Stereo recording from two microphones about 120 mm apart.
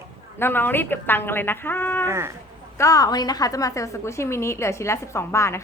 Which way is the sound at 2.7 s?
25° left (ahead or behind).